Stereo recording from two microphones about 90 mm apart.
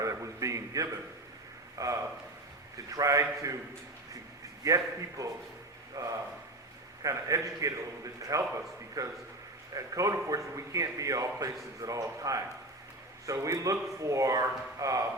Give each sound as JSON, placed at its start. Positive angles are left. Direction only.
{"t": 0.0, "sound": "a sound", "side_deg": -35}
{"t": 1.8, "sound": "a man's voice", "side_deg": -40}
{"t": 4.6, "sound": "a man's voice", "side_deg": -40}